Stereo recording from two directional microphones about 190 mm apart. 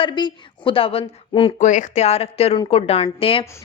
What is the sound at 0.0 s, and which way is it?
Speech, 25° left (ahead or behind).